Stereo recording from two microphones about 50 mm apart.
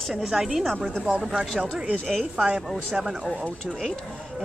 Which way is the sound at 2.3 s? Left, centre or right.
Right.